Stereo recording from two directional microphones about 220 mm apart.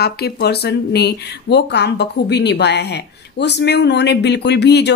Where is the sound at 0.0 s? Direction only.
45° left (ahead or behind).